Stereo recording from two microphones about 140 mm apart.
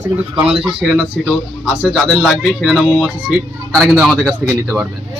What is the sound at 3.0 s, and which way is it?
Speech, centre (ahead or behind).